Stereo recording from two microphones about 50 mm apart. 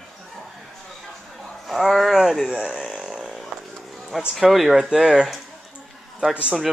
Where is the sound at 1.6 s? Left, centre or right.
Centre.